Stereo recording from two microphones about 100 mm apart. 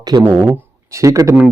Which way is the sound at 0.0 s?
40° right (ahead or behind).